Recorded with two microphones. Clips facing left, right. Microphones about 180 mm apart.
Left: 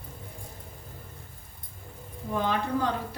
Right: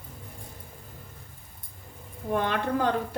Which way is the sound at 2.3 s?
65° right (ahead or behind).